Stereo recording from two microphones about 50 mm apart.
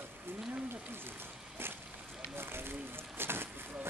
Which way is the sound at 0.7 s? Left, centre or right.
Right.